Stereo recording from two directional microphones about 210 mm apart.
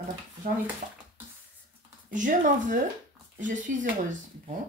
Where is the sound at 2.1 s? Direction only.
40° right (ahead or behind).